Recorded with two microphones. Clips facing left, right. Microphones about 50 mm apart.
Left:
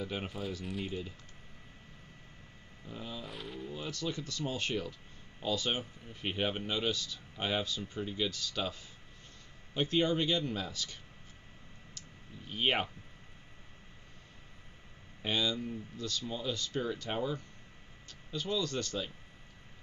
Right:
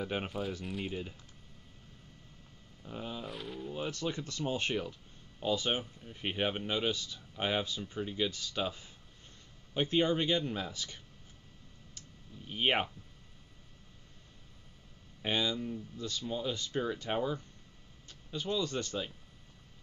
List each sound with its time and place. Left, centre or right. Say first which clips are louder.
0.3 s speech: right 3 dB; centre
0.8 s speech: right 1 dB; centre
2.9 s speech: right 2 dB; right
3.3 s speech: right 2 dB; centre
3.7 s speech: right 2 dB; right
12.4 s speech: right 1 dB; centre
15.2 s speech: even; centre